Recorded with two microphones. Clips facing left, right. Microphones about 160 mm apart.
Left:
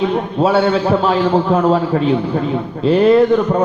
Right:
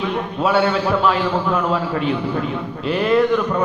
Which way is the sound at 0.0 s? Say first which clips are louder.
Left 5 dB; 35° left (ahead or behind).